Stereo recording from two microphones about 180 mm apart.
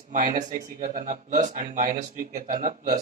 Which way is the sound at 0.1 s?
45° right (ahead or behind).